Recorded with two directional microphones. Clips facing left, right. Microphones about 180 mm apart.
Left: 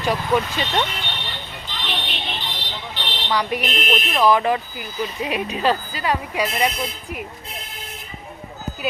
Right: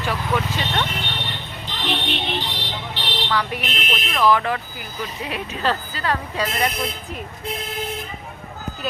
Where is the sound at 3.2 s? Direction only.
15° left (ahead or behind).